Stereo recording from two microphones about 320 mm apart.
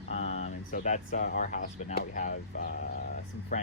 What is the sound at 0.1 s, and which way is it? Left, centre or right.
Speech, left.